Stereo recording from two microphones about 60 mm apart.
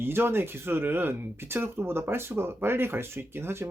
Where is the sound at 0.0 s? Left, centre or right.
Right.